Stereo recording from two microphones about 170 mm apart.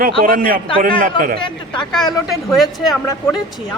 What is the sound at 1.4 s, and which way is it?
Speech, 5° left (ahead or behind).